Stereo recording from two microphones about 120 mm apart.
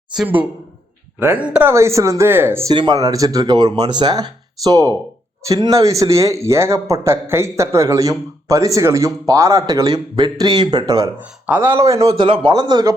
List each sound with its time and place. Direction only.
1.4 s speech: 10° right (ahead or behind)
1.7 s speech: 25° right (ahead or behind)
2.7 s speech: 35° right (ahead or behind)
11.4 s speech: 15° right (ahead or behind)
12.0 s speech: 45° right (ahead or behind)